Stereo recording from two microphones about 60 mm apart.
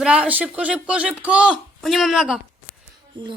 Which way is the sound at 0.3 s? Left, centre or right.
Right.